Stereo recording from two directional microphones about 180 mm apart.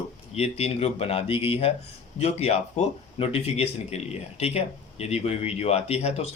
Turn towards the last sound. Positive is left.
turn(degrees=35)  # may be behind; listen again after turning